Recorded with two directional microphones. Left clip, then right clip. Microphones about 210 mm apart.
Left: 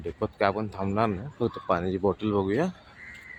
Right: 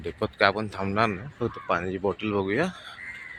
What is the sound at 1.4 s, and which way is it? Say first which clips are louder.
Speech: left 1 dB; 25° left (ahead or behind).